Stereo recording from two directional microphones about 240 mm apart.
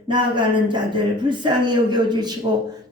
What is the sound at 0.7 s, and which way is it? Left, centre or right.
A man's voice, centre.